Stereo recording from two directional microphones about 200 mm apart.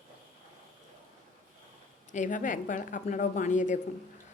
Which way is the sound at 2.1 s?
40° left (ahead or behind).